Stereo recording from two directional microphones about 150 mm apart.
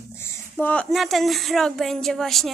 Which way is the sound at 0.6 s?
10° left (ahead or behind).